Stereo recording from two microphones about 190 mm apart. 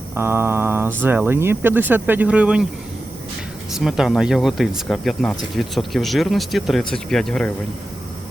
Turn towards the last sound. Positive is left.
turn(degrees=5)  # may be behind; listen again after turning